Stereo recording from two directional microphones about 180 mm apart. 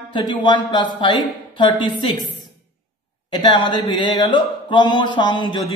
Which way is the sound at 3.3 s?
25° left (ahead or behind).